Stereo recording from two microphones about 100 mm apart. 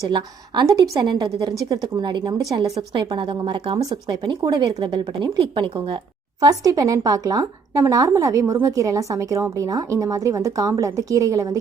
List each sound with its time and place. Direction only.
0.1 s a woman's voice: 50° right (ahead or behind)
6.4 s a woman's voice: 40° right (ahead or behind)